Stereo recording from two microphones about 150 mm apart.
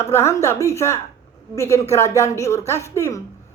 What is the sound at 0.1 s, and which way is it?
A woman's voice, 15° left (ahead or behind).